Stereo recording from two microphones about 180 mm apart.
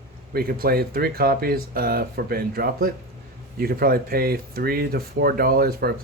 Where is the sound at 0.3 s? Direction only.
55° right (ahead or behind).